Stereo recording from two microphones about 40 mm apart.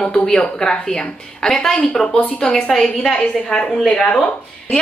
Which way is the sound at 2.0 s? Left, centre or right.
Left.